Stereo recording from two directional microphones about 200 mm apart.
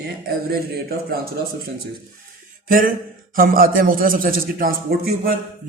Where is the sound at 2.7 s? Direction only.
45° right (ahead or behind).